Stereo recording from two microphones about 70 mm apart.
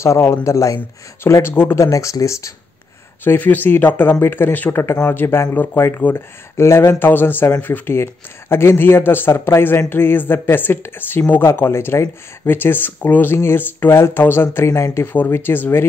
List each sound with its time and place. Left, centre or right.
0.0 s speech: left
1.2 s speech: left
1.8 s speech: left
3.3 s speech: left
14.7 s speech: left
15.2 s speech: left